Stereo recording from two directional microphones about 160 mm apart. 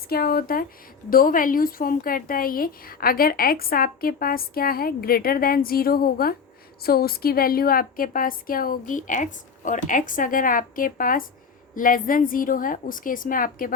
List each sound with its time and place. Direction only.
0.1 s a woman's voice: 70° left (ahead or behind)